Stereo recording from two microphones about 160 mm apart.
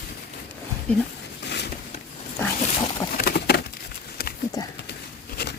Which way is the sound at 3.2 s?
75° left (ahead or behind).